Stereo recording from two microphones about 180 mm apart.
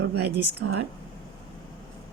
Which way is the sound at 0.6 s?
70° right (ahead or behind).